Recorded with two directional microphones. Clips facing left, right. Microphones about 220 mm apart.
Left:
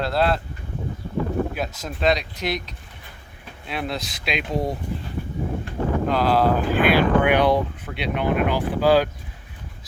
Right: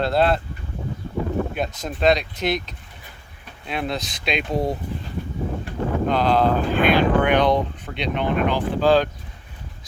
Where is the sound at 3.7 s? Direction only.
Centre (ahead or behind).